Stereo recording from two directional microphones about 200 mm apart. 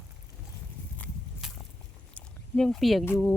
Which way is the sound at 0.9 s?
10° left (ahead or behind).